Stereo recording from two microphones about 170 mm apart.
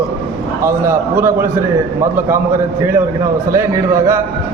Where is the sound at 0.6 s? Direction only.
15° right (ahead or behind).